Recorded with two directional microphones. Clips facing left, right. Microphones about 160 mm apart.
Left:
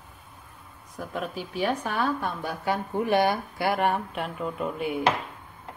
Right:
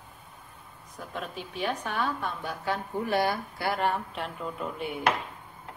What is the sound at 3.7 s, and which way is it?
Speech, 55° left (ahead or behind).